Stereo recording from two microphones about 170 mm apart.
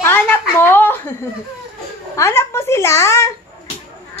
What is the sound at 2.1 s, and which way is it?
Speech, 15° left (ahead or behind).